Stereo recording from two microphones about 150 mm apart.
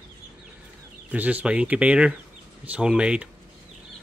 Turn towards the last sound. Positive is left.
turn(degrees=-5)  # may be behind; listen again after turning